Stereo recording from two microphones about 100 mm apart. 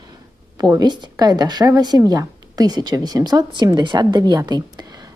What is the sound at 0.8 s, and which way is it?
A woman's voice, 45° right (ahead or behind).